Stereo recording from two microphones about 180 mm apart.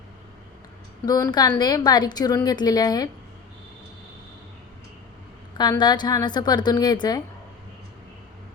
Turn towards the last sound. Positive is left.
turn(degrees=20)  # may be behind; listen again after turning